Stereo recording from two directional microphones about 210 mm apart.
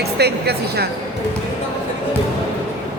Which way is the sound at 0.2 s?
50° right (ahead or behind).